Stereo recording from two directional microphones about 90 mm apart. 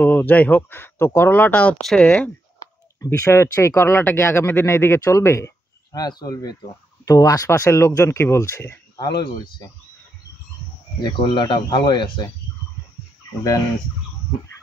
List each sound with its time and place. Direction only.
0.0 s speech: 20° left (ahead or behind)
1.8 s speech: 5° left (ahead or behind)
2.0 s speech: 15° left (ahead or behind)
3.1 s speech: 30° left (ahead or behind)
5.9 s speech: 50° left (ahead or behind); by 8.7 s 30° left (ahead or behind)
8.9 s speech: 55° left (ahead or behind)
11.0 s speech: 60° left (ahead or behind)